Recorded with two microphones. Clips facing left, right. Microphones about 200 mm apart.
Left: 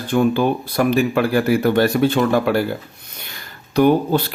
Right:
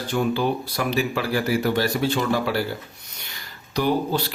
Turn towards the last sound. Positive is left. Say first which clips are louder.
# left 7 dB
turn(degrees=55)  # may be behind; listen again after turning